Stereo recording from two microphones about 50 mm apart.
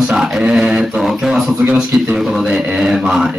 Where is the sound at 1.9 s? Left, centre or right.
Centre.